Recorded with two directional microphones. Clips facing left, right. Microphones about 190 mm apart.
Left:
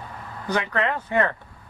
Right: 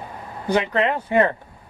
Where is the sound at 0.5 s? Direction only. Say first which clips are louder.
Right 4 dB; 20° right (ahead or behind).